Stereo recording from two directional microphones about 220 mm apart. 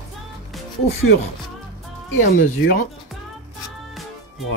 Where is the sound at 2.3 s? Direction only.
40° left (ahead or behind).